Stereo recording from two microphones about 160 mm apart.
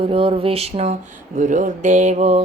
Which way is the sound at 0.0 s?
35° right (ahead or behind).